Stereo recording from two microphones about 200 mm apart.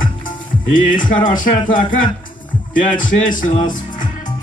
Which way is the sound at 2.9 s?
40° left (ahead or behind).